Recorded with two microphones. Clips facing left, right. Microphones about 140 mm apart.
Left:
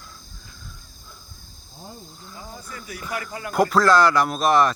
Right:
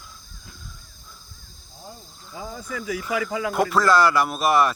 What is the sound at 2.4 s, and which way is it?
Speech, 90° right.